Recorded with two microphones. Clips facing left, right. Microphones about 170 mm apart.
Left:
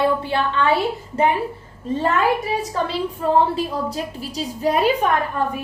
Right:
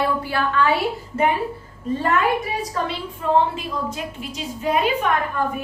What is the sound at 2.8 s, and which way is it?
A woman's voice, 35° left (ahead or behind).